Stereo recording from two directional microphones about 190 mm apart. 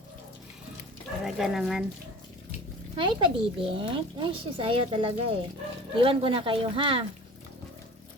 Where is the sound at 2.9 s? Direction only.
25° right (ahead or behind).